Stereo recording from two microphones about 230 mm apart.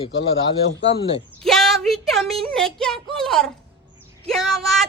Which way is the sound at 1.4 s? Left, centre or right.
Centre.